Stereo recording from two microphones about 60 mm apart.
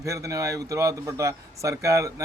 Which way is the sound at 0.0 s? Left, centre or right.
Right.